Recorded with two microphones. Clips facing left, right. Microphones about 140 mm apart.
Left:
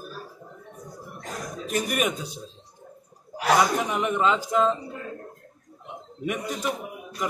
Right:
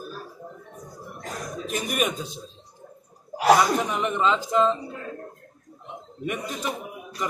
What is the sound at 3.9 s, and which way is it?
Speech, 10° left (ahead or behind).